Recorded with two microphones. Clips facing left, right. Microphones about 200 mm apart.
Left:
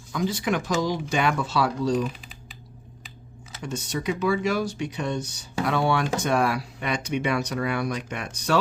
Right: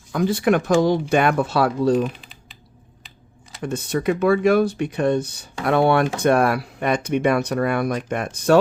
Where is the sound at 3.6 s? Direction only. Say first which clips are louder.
Right 7 dB; 55° right (ahead or behind).